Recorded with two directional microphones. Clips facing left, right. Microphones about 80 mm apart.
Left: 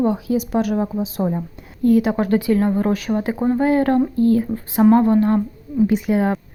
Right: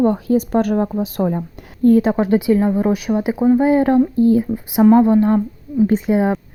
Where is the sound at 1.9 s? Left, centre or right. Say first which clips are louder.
Right 3 dB; right.